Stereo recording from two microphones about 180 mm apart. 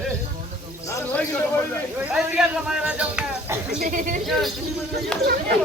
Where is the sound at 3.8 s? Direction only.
45° right (ahead or behind).